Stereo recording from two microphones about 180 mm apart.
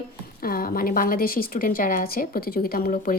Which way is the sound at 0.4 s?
55° left (ahead or behind).